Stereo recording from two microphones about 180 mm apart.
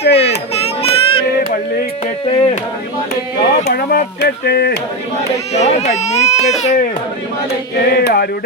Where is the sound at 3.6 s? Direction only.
60° left (ahead or behind).